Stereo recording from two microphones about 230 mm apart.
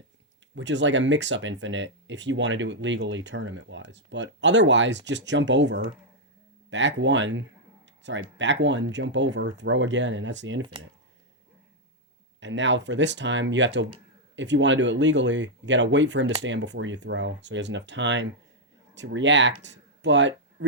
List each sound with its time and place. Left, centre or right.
0.5 s speech: right
12.4 s speech: right